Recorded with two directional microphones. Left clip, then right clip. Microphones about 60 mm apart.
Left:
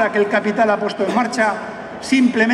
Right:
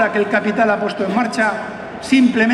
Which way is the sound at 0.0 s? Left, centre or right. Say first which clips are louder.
Even; centre.